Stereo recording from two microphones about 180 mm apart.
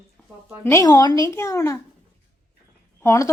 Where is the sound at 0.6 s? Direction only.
15° left (ahead or behind).